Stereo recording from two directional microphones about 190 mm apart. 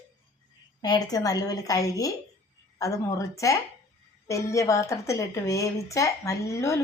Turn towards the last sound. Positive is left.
turn(degrees=15)  # may be behind; listen again after turning